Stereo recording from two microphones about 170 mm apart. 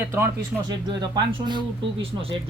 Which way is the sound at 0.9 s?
25° right (ahead or behind).